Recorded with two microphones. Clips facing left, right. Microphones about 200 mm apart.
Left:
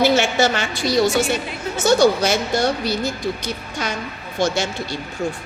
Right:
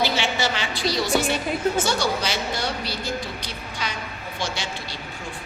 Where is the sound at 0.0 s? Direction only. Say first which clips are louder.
Left 7 dB; 45° left (ahead or behind).